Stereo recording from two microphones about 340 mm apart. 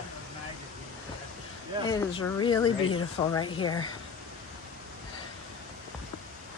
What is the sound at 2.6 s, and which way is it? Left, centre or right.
Speech, left.